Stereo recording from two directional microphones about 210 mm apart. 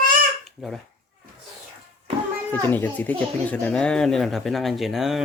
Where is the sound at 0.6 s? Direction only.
Centre (ahead or behind).